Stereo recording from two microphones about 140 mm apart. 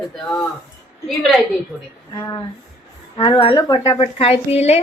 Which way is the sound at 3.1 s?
35° left (ahead or behind).